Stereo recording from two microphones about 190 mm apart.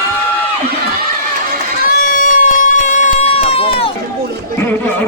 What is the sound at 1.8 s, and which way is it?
Run, 45° left (ahead or behind).